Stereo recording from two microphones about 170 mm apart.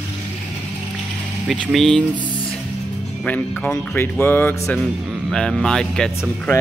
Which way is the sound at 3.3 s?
10° left (ahead or behind).